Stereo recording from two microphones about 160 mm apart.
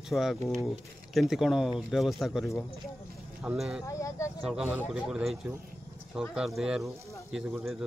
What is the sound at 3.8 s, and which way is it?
Speech, 20° left (ahead or behind).